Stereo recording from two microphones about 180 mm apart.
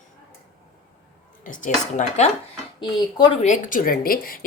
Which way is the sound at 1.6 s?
40° left (ahead or behind).